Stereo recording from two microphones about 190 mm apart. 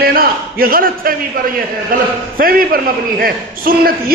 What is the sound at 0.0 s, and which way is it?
A man's voice, 50° right (ahead or behind).